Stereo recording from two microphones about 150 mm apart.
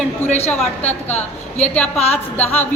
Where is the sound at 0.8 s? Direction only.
50° left (ahead or behind).